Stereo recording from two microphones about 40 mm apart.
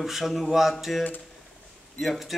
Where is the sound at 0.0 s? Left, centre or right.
Centre.